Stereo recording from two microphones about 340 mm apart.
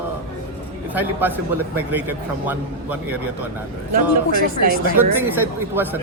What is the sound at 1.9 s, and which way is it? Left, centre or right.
A man's voice, centre.